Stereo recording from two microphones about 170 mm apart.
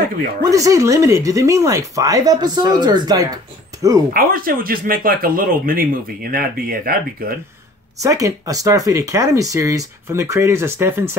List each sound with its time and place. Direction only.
0.4 s speech: 20° right (ahead or behind)
4.1 s speech: 55° right (ahead or behind)
8.0 s speech: 20° right (ahead or behind)